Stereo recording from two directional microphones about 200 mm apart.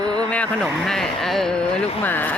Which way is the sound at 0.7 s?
Centre (ahead or behind).